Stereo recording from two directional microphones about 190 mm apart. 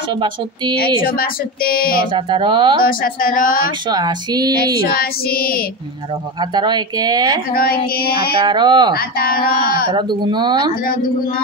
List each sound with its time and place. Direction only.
1.0 s speech: 50° left (ahead or behind)
2.1 s speech: 25° right (ahead or behind)
2.8 s speech: 50° left (ahead or behind)
3.9 s speech: 20° right (ahead or behind)
4.8 s speech: 50° left (ahead or behind)
6.5 s speech: 25° right (ahead or behind)
7.5 s speech: 50° left (ahead or behind)
8.4 s speech: 25° right (ahead or behind)
8.9 s speech: 50° left (ahead or behind)
9.8 s speech: 25° right (ahead or behind)